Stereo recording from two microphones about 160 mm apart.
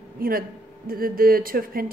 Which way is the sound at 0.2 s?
65° right (ahead or behind).